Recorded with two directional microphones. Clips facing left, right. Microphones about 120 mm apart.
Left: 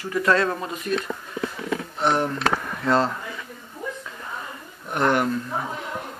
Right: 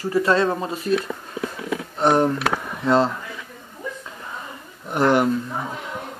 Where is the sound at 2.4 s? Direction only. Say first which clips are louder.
Even; 15° right (ahead or behind).